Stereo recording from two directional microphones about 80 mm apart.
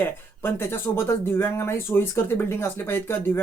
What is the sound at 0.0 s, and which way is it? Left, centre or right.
Speech, left.